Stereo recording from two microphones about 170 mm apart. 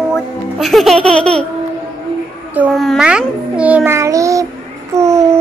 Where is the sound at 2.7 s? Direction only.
Centre (ahead or behind); by 5.4 s 15° right (ahead or behind).